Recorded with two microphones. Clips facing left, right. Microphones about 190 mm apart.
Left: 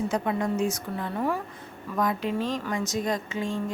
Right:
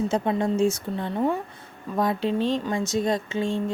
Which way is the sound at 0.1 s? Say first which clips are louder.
Right 3 dB; 25° right (ahead or behind).